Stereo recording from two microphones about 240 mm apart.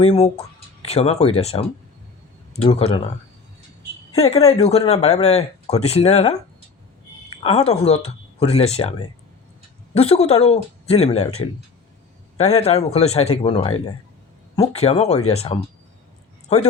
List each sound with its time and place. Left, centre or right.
0.0 s speech: left
4.1 s speech: left
7.4 s speech: left
10.0 s speech: left
12.4 s speech: left